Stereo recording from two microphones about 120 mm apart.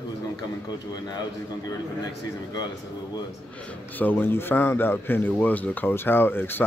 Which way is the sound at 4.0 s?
15° left (ahead or behind).